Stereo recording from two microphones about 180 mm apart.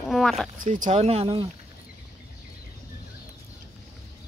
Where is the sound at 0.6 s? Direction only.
45° right (ahead or behind).